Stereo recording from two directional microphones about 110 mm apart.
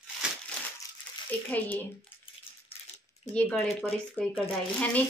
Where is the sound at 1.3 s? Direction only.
15° left (ahead or behind).